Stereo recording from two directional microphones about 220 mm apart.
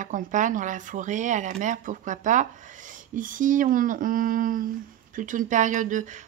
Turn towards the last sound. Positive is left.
turn(degrees=-35)  # may be behind; listen again after turning